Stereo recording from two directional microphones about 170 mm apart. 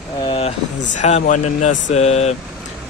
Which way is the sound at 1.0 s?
40° left (ahead or behind).